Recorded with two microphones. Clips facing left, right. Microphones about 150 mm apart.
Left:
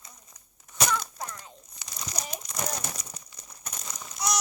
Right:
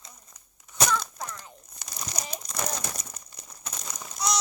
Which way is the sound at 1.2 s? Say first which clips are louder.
Even; 20° left (ahead or behind).